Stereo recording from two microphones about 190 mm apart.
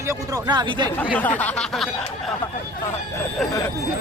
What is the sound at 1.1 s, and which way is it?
Snicker, 10° left (ahead or behind).